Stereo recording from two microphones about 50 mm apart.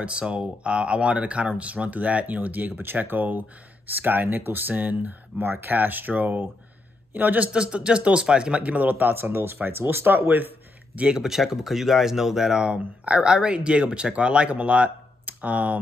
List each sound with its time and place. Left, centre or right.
0.0 s speech: right
5.4 s speech: right
11.0 s speech: centre
11.2 s speech: centre; by 15.8 s right